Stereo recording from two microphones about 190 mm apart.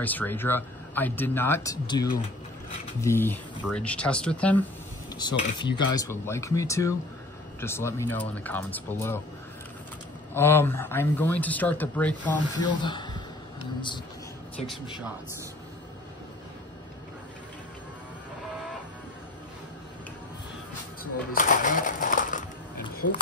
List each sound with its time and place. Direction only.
0.0 s speech: 10° left (ahead or behind)
5.1 s speech: 25° left (ahead or behind)
10.3 s speech: 10° left (ahead or behind)
12.5 s speech: 25° left (ahead or behind)
21.0 s a sound: 45° left (ahead or behind)